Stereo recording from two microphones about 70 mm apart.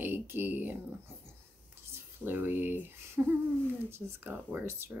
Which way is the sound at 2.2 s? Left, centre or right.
Right.